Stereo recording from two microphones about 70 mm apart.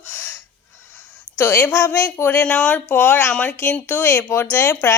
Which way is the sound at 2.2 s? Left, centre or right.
Left.